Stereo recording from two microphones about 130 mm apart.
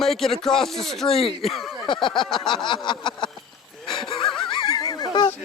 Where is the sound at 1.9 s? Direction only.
40° left (ahead or behind).